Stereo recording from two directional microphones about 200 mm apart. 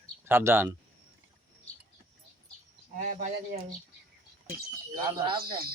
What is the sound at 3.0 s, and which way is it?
Speech, 35° right (ahead or behind).